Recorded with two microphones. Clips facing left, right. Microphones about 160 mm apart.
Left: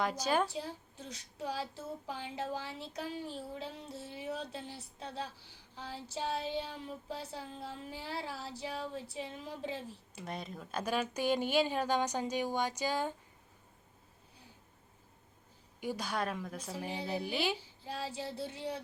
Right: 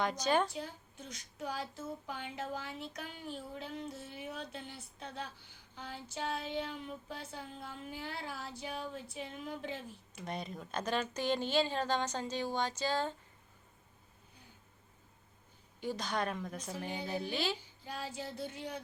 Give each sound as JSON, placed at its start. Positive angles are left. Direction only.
{"t": 0.0, "sound": "speech", "side_deg": 5}
{"t": 0.5, "sound": "a woman's voice", "side_deg": 35}
{"t": 10.2, "sound": "speech", "side_deg": 0}
{"t": 15.8, "sound": "speech", "side_deg": 10}
{"t": 17.6, "sound": "a woman's voice", "side_deg": 30}